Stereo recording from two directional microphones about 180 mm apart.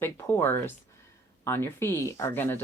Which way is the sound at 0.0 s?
15° left (ahead or behind).